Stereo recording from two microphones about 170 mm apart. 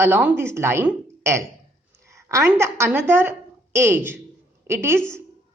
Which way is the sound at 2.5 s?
15° right (ahead or behind).